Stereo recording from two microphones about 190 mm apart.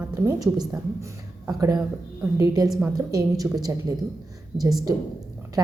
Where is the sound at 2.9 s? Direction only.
20° right (ahead or behind).